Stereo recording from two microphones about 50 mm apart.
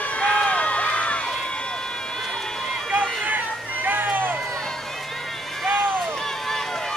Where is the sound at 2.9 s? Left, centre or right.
Right.